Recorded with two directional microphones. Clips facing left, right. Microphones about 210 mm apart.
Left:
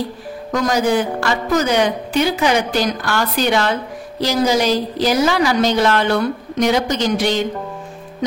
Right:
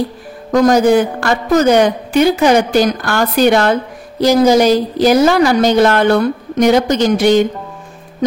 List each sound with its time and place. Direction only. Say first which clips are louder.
0.5 s a woman's voice: right 7 dB; 50° right (ahead or behind)